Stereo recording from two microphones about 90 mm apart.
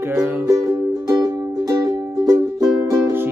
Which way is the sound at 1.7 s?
45° right (ahead or behind).